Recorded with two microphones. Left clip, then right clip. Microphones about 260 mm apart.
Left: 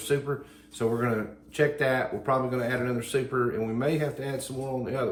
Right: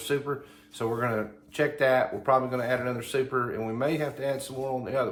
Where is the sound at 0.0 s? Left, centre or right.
Centre.